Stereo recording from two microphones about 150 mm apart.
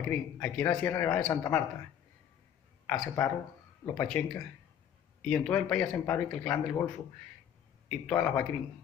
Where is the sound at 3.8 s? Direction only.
20° left (ahead or behind).